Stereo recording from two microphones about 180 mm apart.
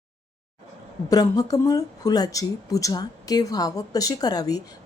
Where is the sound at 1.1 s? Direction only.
20° left (ahead or behind).